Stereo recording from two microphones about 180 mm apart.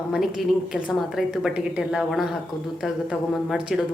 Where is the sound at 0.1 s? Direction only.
Centre (ahead or behind).